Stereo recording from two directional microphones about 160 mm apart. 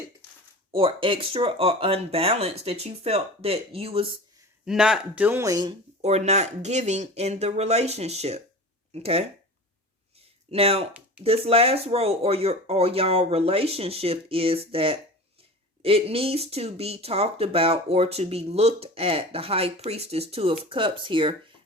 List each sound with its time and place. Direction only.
0.7 s speech: 35° right (ahead or behind)
4.6 s speech: 5° right (ahead or behind); by 5.7 s 25° right (ahead or behind)
6.0 s speech: 45° right (ahead or behind)
10.5 s speech: 35° right (ahead or behind)